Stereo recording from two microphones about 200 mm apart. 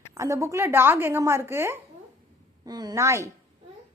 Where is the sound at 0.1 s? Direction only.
15° right (ahead or behind).